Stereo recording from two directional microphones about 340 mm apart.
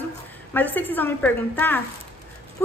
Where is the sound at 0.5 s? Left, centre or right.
Centre.